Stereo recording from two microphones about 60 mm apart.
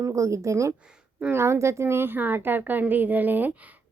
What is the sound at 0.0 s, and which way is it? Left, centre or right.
Speech, right.